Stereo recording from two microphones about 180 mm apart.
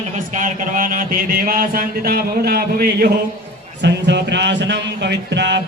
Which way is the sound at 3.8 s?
70° right (ahead or behind).